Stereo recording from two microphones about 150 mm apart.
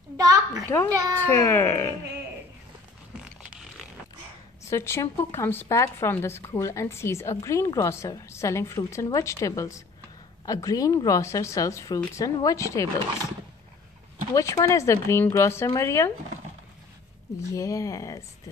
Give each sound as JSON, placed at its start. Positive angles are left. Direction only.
{"t": 0.2, "sound": "a sound", "side_deg": -20}
{"t": 0.9, "sound": "speech", "side_deg": -20}
{"t": 1.2, "sound": "a child's voice", "side_deg": 15}
{"t": 4.6, "sound": "a woman's voice", "side_deg": 15}
{"t": 14.3, "sound": "a woman's voice", "side_deg": 20}
{"t": 17.4, "sound": "a woman's voice", "side_deg": 20}